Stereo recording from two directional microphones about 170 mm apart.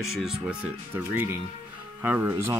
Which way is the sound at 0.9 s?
10° right (ahead or behind).